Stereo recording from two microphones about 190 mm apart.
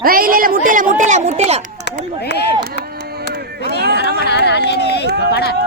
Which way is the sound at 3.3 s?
55° right (ahead or behind).